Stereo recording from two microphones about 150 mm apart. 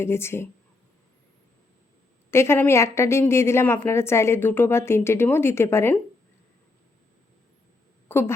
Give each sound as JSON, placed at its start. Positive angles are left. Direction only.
{"t": 0.0, "sound": "a woman's voice", "side_deg": 15}
{"t": 2.3, "sound": "a woman's voice", "side_deg": 15}
{"t": 8.0, "sound": "a sound", "side_deg": 15}